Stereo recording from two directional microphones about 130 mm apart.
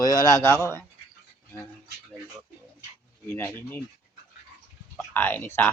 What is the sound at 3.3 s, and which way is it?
Mantra, 15° left (ahead or behind).